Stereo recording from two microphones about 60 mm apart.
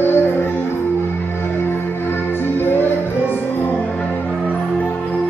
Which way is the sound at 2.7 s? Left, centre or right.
Left.